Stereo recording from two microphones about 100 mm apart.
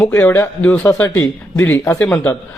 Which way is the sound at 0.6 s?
15° left (ahead or behind).